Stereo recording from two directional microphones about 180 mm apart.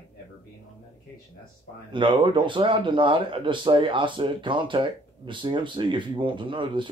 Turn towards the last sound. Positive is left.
turn(degrees=-25)  # may be behind; listen again after turning